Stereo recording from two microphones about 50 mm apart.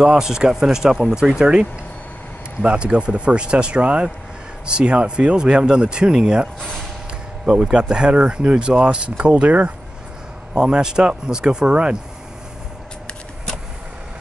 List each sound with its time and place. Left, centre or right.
0.0 s speech: centre
7.7 s speech: centre
10.5 s speech: centre